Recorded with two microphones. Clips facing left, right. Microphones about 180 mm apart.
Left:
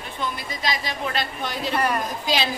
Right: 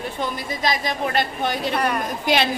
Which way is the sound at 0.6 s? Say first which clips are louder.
Right 4 dB; 50° right (ahead or behind).